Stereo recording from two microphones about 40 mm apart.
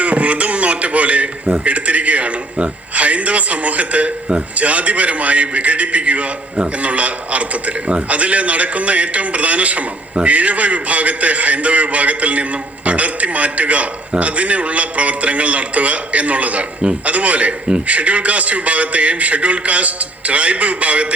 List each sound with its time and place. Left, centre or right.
0.0 s a man's voice: right